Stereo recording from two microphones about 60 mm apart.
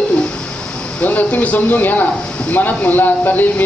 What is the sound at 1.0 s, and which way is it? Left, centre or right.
Speech, left.